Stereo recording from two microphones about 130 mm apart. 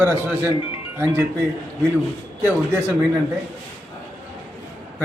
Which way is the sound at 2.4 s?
15° right (ahead or behind).